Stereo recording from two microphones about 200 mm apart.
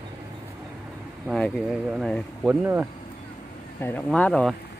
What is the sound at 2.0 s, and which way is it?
Speech, 5° right (ahead or behind).